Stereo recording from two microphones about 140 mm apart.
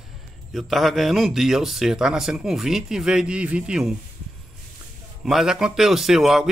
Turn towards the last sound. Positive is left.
turn(degrees=0)  # may be behind; listen again after turning